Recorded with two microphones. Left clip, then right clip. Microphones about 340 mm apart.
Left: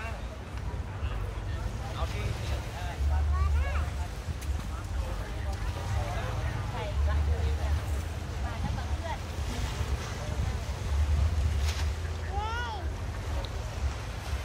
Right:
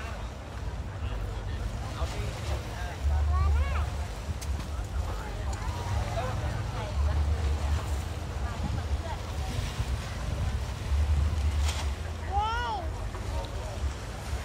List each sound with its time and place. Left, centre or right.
12.4 s boat: right